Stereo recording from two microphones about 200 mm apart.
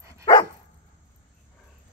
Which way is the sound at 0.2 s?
20° left (ahead or behind).